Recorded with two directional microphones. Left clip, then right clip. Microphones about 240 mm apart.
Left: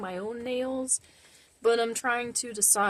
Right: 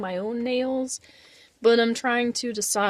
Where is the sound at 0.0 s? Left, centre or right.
Right.